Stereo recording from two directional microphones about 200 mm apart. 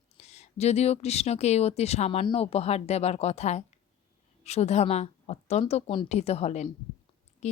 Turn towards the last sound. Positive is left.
turn(degrees=35)  # may be behind; listen again after turning